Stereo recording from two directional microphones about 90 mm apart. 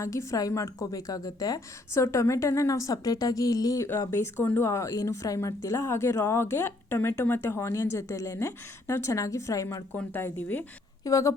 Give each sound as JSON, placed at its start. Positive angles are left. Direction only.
{"t": 0.0, "sound": "a woman's voice", "side_deg": 35}
{"t": 4.1, "sound": "a woman's voice", "side_deg": 25}
{"t": 9.9, "sound": "speech", "side_deg": 20}
{"t": 11.0, "sound": "a woman's voice", "side_deg": 40}